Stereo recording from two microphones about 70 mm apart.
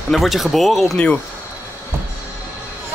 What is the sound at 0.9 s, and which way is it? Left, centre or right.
Speech, centre.